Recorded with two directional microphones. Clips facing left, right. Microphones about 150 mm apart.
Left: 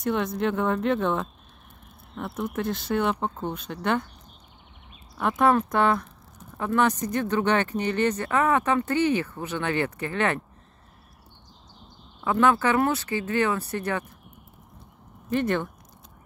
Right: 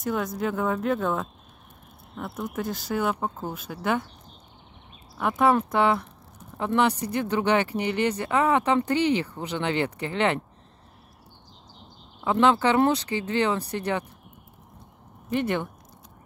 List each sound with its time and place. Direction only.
0.0 s speech: centre (ahead or behind)
5.1 s speech: 5° right (ahead or behind)
12.2 s speech: 20° right (ahead or behind)
15.2 s speech: 15° right (ahead or behind)